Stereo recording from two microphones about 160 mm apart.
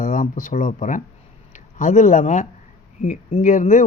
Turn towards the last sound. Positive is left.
turn(degrees=50)  # may be behind; listen again after turning